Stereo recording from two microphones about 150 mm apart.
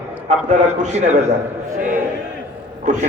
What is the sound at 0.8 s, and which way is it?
Speech, 50° right (ahead or behind).